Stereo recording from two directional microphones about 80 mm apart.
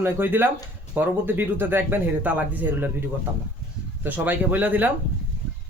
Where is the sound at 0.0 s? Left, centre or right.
Right.